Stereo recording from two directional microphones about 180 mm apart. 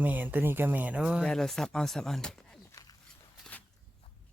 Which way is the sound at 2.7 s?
20° left (ahead or behind).